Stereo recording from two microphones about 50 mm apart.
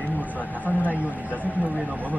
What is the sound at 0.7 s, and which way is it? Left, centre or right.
Speech, left.